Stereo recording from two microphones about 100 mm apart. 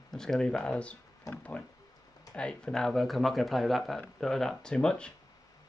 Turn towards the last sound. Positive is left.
turn(degrees=5)  # may be behind; listen again after turning